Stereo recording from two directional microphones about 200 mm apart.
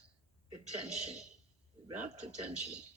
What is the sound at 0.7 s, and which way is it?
Speech, 35° right (ahead or behind).